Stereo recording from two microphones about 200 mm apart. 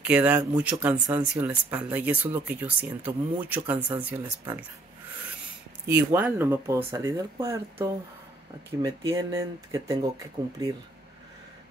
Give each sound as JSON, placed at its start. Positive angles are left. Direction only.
{"t": 0.0, "sound": "speech", "side_deg": -5}
{"t": 5.9, "sound": "speech", "side_deg": -10}